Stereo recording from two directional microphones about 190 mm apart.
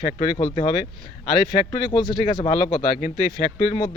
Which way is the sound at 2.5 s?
35° left (ahead or behind).